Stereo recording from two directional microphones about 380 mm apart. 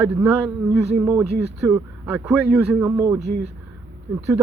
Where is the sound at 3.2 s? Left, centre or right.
Right.